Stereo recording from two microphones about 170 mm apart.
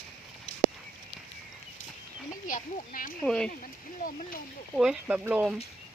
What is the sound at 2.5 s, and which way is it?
Speech, 55° left (ahead or behind).